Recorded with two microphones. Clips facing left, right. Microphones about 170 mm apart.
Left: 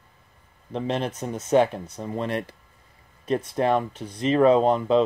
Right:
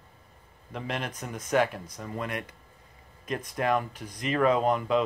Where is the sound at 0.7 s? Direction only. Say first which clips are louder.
Left 7 dB; 30° left (ahead or behind).